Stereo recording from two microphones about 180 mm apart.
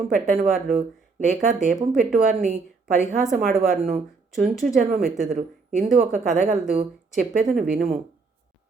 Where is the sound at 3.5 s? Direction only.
40° right (ahead or behind).